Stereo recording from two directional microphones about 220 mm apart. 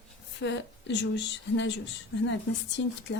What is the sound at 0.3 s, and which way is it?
A woman's voice, 55° left (ahead or behind).